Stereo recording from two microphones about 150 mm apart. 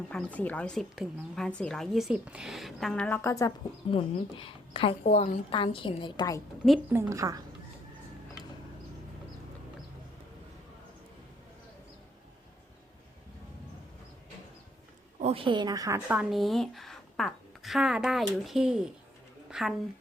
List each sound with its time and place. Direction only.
0.1 s a woman's voice: 10° left (ahead or behind)
3.9 s a woman's voice: 35° left (ahead or behind)
5.5 s a woman's voice: 35° left (ahead or behind)
6.9 s a woman's voice: 20° right (ahead or behind)
15.2 s speech: 40° right (ahead or behind); by 16.0 s 25° right (ahead or behind)
16.0 s a woman's voice: 5° right (ahead or behind)